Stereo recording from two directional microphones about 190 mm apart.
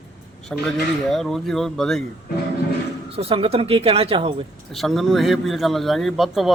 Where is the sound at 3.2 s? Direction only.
30° right (ahead or behind).